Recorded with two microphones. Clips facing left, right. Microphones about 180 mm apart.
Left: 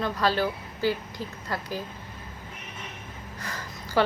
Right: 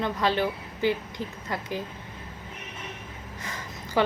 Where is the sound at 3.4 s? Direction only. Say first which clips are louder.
Even; 20° right (ahead or behind).